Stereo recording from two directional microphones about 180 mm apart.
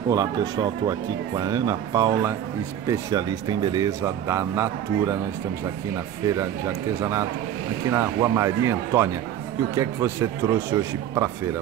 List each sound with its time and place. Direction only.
0.1 s speech: 20° right (ahead or behind)
7.0 s speech: 15° right (ahead or behind)